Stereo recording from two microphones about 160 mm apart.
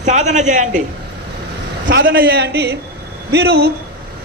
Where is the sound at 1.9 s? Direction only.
70° right (ahead or behind).